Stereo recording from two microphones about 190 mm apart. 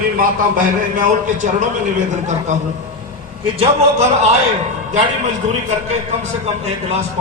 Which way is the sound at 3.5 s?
30° right (ahead or behind).